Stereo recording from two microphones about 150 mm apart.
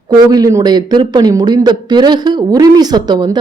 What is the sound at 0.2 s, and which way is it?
A man's voice, 25° right (ahead or behind).